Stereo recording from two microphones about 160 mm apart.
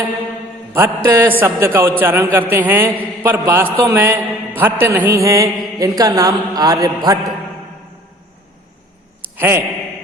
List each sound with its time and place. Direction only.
0.7 s a man's voice: 15° right (ahead or behind)
9.3 s a man's voice: 15° right (ahead or behind)